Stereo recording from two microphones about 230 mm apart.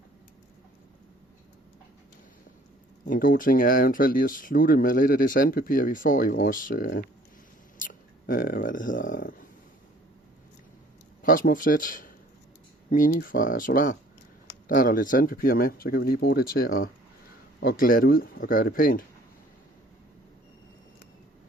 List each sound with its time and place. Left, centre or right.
3.1 s speech: left
11.2 s speech: left